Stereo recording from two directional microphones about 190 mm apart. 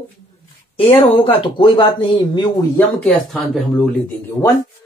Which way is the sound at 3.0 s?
5° left (ahead or behind).